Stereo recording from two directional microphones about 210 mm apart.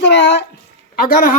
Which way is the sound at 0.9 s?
40° left (ahead or behind).